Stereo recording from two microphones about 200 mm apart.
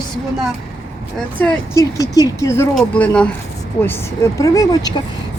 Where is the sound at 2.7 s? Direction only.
5° left (ahead or behind).